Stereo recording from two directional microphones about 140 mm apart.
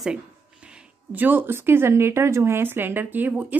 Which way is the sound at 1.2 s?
15° right (ahead or behind).